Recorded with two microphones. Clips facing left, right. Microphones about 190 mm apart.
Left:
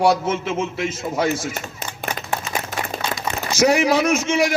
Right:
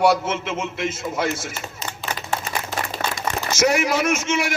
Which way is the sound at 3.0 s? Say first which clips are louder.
Even; 50° right (ahead or behind).